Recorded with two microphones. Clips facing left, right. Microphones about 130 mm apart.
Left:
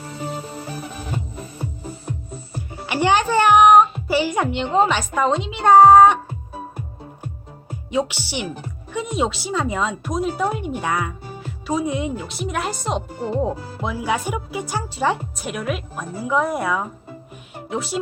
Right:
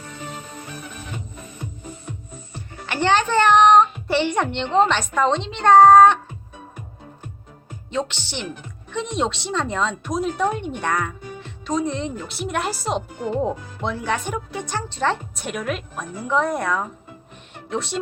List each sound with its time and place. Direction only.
0.0 s music: 35° left (ahead or behind)
2.8 s a woman's voice: 10° left (ahead or behind)
7.9 s a woman's voice: 10° left (ahead or behind)
8.4 s a woman's voice: 35° left (ahead or behind)
8.9 s a woman's voice: 5° left (ahead or behind)
13.1 s a woman's voice: 35° left (ahead or behind)
13.8 s a woman's voice: 5° left (ahead or behind)